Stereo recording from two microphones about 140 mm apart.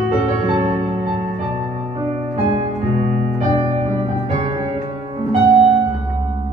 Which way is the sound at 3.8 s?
50° right (ahead or behind).